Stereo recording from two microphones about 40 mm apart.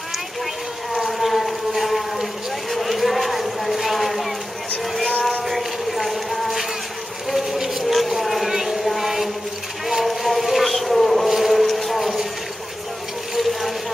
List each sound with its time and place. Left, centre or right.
1.0 s a sound: centre
4.8 s vehicle: centre
5.5 s a sound: centre
7.3 s vehicle: centre
9.8 s insect: centre
13.3 s water: centre